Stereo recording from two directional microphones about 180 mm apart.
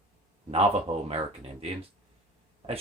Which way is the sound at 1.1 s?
35° right (ahead or behind).